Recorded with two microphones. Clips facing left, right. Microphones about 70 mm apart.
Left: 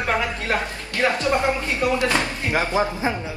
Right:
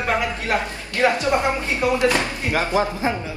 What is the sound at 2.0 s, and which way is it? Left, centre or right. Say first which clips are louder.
Speech: right 2 dB; right.